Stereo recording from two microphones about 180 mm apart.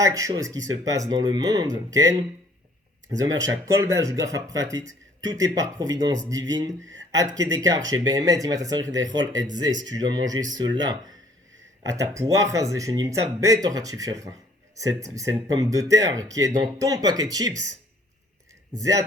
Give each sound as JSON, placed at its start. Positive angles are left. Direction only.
{"t": 0.0, "sound": "speech", "side_deg": -20}
{"t": 6.9, "sound": "a sound", "side_deg": -20}
{"t": 7.3, "sound": "speech", "side_deg": -20}
{"t": 18.8, "sound": "speech", "side_deg": -20}